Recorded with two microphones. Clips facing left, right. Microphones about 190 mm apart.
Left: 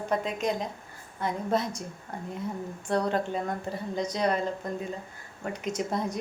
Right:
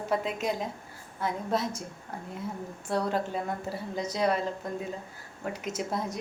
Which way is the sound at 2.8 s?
5° right (ahead or behind).